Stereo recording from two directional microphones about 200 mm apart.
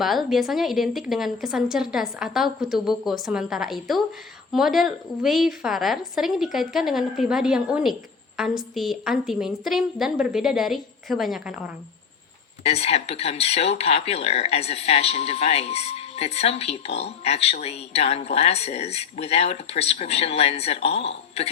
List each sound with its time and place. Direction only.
0.0 s a woman's voice: centre (ahead or behind)
12.6 s speech: 30° left (ahead or behind)